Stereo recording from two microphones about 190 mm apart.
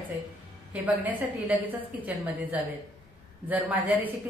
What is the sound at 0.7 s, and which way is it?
Speech, 5° right (ahead or behind).